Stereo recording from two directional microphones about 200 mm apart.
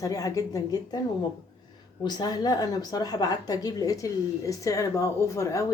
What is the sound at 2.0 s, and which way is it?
A woman's voice, 20° left (ahead or behind).